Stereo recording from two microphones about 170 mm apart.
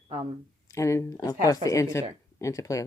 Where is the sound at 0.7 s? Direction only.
15° left (ahead or behind).